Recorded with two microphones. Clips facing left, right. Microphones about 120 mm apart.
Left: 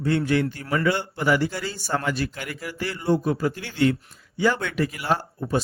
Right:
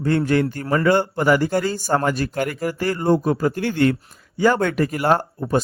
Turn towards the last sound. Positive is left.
turn(degrees=-55)  # may be behind; listen again after turning